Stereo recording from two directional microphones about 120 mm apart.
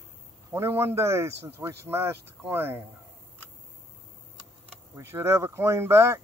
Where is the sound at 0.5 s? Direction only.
20° right (ahead or behind).